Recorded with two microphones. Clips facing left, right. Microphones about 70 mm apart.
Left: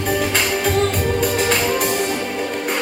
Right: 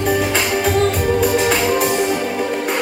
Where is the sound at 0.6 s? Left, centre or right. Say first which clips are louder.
Right 3 dB; centre.